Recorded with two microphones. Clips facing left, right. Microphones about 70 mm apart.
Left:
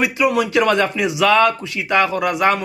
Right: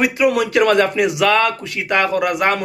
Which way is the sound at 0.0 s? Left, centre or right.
Right.